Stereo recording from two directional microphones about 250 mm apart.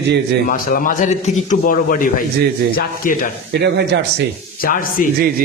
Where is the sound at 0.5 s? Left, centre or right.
Left.